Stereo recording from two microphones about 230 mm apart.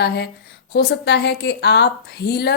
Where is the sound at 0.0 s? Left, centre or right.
Left.